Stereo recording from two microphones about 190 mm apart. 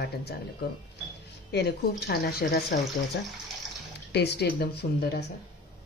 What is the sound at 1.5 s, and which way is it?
Speech, 60° left (ahead or behind).